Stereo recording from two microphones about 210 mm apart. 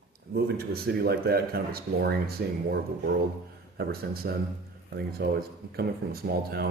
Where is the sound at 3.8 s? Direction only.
45° right (ahead or behind).